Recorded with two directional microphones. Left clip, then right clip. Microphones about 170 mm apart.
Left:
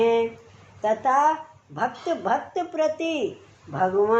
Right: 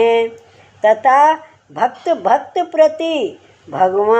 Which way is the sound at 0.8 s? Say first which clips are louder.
Right 10 dB; 30° right (ahead or behind).